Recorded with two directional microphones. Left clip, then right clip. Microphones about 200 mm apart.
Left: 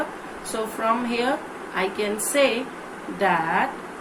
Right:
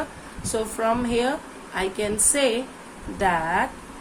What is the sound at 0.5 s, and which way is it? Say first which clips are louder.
Speech: right 2 dB; 25° right (ahead or behind).